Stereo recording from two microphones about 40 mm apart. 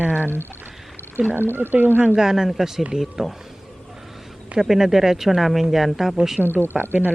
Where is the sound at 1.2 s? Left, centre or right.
Right.